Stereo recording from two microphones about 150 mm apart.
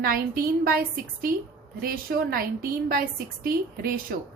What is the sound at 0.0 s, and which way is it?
A woman's voice, 75° right (ahead or behind).